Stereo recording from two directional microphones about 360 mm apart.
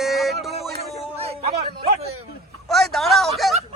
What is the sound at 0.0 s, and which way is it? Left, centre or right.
Music, centre.